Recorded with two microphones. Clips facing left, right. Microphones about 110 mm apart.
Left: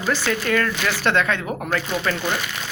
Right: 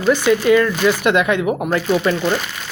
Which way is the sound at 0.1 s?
15° right (ahead or behind).